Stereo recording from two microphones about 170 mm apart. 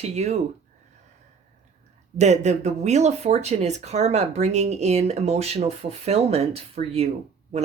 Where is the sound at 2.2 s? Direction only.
40° right (ahead or behind).